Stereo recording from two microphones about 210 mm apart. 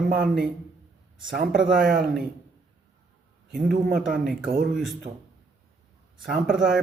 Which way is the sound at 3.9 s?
Centre (ahead or behind).